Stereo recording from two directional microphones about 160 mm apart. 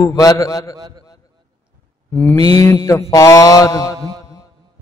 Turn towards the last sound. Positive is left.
turn(degrees=20)  # may be behind; listen again after turning